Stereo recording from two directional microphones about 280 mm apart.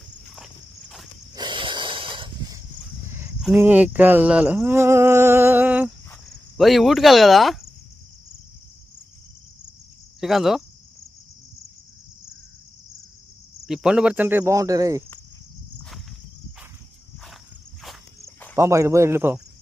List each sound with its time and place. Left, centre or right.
0.3 s walk: centre
1.3 s snort: centre
3.1 s speech: centre
10.2 s cricket: centre
13.7 s speech: centre
17.8 s walk: centre
18.5 s speech: centre